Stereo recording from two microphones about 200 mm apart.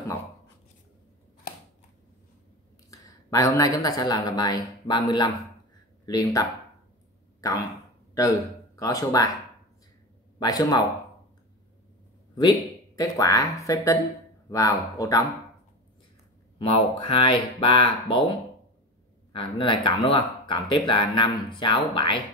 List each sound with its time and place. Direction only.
2.9 s speech: 15° left (ahead or behind)
8.1 s speech: 15° left (ahead or behind)
10.4 s speech: 20° left (ahead or behind)
12.9 s speech: 15° left (ahead or behind)
16.5 s speech: 30° left (ahead or behind)
19.3 s speech: 25° left (ahead or behind)